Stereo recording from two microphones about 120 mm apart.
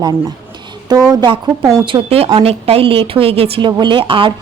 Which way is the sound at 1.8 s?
45° right (ahead or behind).